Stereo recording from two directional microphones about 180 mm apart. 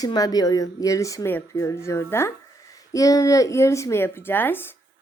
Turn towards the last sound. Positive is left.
turn(degrees=10)  # may be behind; listen again after turning